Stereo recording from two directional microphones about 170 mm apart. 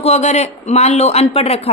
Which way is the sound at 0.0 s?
40° left (ahead or behind).